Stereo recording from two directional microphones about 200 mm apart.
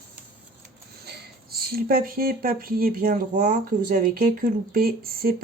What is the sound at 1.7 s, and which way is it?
Speech, 50° right (ahead or behind).